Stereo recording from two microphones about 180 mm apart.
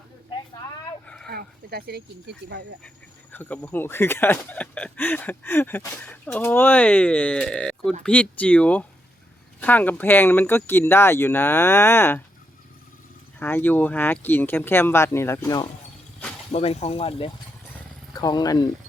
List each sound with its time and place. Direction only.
1.0 s a sound: 5° left (ahead or behind)
1.3 s speech: 60° right (ahead or behind)
3.3 s speech: 10° left (ahead or behind)
13.4 s speech: 10° left (ahead or behind)
16.5 s speech: 35° left (ahead or behind)